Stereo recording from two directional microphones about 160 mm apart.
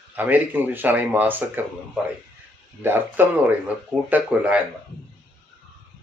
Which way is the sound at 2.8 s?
15° right (ahead or behind).